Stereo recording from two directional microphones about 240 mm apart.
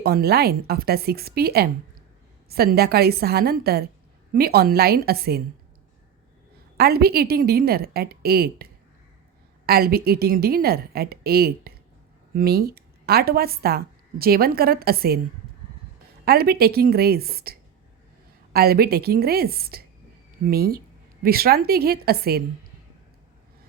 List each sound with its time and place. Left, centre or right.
0.0 s a woman's voice: right
6.7 s a woman's voice: right
16.2 s a woman's voice: right